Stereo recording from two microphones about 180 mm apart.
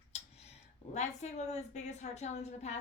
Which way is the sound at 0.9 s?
40° left (ahead or behind).